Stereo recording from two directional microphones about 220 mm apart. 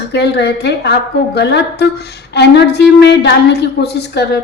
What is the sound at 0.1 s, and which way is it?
A woman's voice, 50° left (ahead or behind).